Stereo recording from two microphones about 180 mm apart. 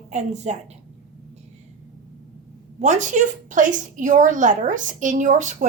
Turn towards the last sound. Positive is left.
turn(degrees=-45)  # may be behind; listen again after turning